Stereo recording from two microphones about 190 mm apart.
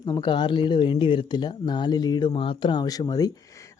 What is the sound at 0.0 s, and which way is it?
Speech, 20° left (ahead or behind).